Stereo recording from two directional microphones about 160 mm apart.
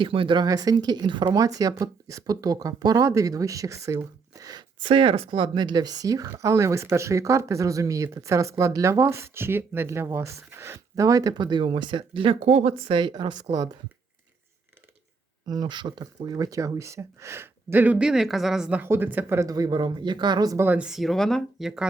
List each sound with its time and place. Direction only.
0.0 s speech: 30° right (ahead or behind)
15.4 s speech: 25° right (ahead or behind)
20.7 s speech: 5° right (ahead or behind)